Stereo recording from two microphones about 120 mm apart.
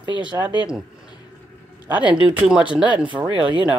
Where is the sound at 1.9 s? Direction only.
10° right (ahead or behind).